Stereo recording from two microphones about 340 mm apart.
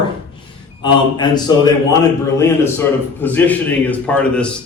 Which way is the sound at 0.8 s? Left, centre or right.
Centre.